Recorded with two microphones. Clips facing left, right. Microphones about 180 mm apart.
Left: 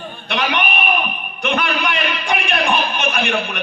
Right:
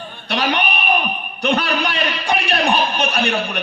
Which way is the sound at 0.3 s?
35° right (ahead or behind).